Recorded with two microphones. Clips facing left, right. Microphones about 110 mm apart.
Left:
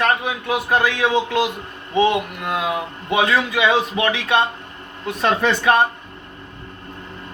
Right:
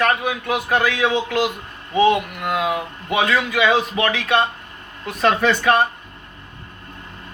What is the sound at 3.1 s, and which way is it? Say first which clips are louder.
A man's voice: left 1 dB; 25° left (ahead or behind).